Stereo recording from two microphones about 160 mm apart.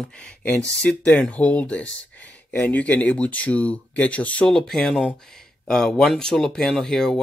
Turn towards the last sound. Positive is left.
turn(degrees=5)  # may be behind; listen again after turning